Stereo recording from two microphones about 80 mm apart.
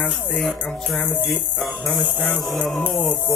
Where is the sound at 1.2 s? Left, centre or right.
Centre.